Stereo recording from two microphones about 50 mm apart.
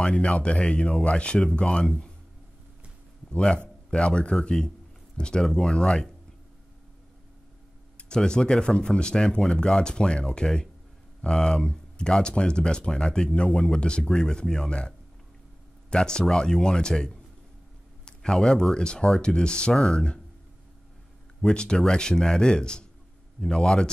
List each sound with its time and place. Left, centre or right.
0.0 s speech: left
3.3 s a man's voice: left
8.0 s speech: centre
21.4 s speech: centre